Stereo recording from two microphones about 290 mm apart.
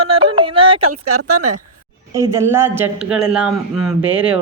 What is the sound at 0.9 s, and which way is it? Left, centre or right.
Speech, right.